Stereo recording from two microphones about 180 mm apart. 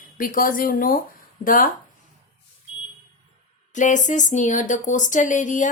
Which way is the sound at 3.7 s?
45° left (ahead or behind).